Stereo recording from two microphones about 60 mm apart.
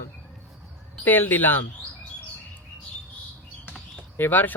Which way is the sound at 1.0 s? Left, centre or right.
Left.